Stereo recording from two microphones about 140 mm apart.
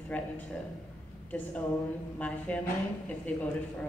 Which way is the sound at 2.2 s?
10° left (ahead or behind).